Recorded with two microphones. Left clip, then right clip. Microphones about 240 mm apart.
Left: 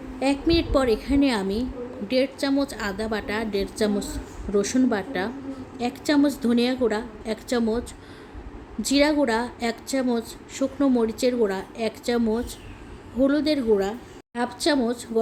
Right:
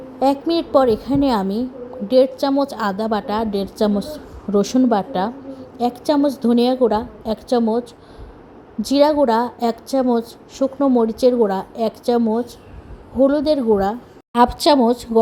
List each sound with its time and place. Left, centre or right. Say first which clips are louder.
0.2 s a woman's voice: right 5 dB; centre
8.8 s a woman's voice: right 6 dB; centre
14.3 s speech: right 10 dB; right